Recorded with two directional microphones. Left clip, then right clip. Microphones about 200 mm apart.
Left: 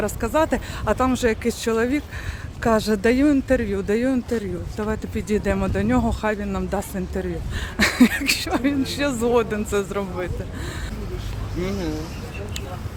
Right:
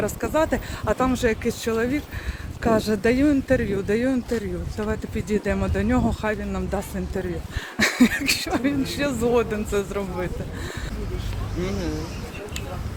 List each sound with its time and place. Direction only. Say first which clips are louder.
0.0 s speech: left 1 dB; 10° left (ahead or behind)
11.6 s speech: left 2 dB; 40° left (ahead or behind)